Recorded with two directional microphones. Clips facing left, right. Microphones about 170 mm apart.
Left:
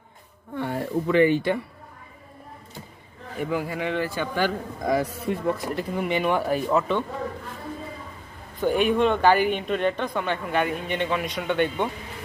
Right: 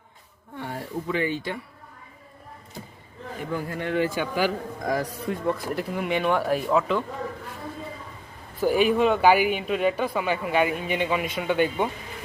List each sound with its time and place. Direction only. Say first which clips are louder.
0.5 s speech: left 6 dB; 60° left (ahead or behind)
3.5 s speech: left 2 dB; centre (ahead or behind)
4.0 s speech: right 1 dB; 15° right (ahead or behind)
8.6 s speech: even; 5° right (ahead or behind)